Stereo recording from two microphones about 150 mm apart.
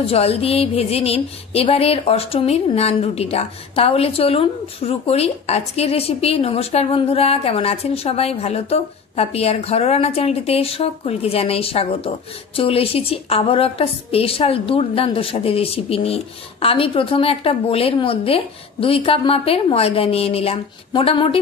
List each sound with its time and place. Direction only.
0.0 s music: 40° left (ahead or behind)